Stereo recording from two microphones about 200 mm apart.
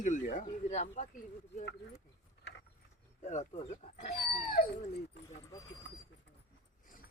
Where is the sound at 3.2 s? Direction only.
35° left (ahead or behind).